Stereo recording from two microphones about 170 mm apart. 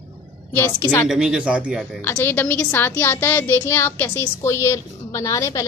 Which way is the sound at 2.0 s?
15° left (ahead or behind).